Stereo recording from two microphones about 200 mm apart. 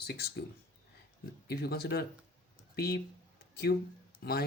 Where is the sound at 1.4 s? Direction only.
55° left (ahead or behind).